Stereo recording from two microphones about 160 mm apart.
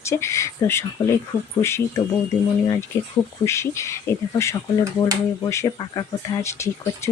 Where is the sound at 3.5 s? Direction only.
15° left (ahead or behind).